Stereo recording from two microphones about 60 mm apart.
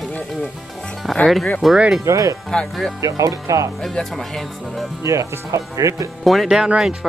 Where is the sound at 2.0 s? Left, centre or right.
Right.